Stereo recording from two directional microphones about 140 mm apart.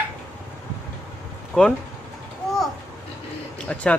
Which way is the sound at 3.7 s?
10° left (ahead or behind).